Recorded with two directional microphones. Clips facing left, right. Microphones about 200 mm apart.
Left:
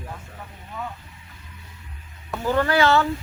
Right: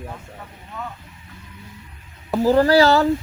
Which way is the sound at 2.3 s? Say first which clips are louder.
Right 7 dB; 35° right (ahead or behind).